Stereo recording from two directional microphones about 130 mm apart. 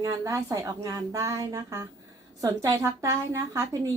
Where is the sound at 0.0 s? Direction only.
25° right (ahead or behind).